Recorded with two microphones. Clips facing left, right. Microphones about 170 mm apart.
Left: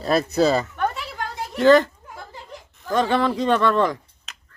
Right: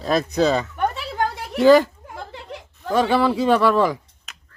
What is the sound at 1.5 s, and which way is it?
Speech, 10° right (ahead or behind).